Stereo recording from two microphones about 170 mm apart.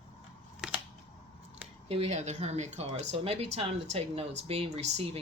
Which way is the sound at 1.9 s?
40° right (ahead or behind).